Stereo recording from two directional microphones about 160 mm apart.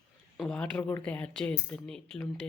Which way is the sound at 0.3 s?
5° left (ahead or behind).